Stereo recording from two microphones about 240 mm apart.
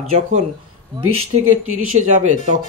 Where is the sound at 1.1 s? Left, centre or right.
Right.